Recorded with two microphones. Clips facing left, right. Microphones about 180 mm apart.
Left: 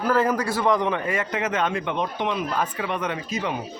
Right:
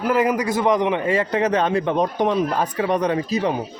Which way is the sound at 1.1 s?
35° right (ahead or behind).